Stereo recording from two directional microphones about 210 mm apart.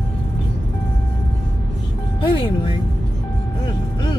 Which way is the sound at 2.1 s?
25° left (ahead or behind).